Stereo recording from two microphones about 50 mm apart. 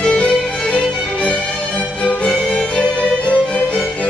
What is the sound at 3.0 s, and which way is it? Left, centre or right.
Music, left.